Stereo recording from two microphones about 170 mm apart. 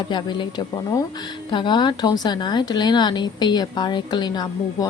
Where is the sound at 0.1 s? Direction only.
25° left (ahead or behind).